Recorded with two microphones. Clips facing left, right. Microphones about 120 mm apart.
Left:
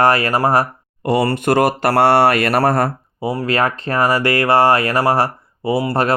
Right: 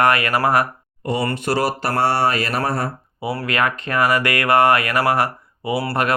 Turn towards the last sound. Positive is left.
turn(degrees=35)  # may be behind; listen again after turning